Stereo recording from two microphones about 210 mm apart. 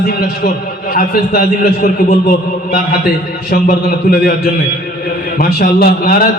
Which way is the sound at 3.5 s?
45° left (ahead or behind).